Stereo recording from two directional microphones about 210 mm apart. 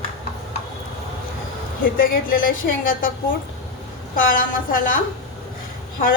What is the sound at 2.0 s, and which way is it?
A woman's voice, 40° left (ahead or behind).